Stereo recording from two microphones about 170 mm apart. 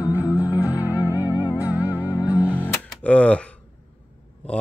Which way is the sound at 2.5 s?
10° left (ahead or behind).